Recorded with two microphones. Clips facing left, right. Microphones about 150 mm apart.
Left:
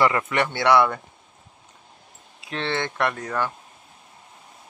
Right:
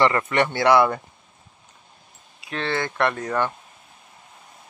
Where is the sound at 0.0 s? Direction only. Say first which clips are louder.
Right 2 dB; 5° left (ahead or behind).